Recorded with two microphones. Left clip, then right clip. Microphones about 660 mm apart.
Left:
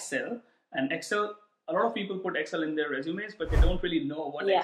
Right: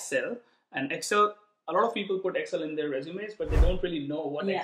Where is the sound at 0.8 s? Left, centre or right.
Right.